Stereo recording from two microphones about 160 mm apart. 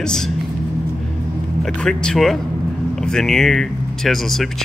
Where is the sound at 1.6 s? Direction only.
5° left (ahead or behind).